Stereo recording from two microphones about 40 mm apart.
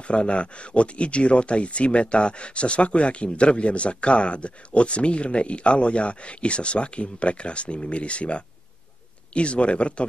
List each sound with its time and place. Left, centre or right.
0.1 s speech: left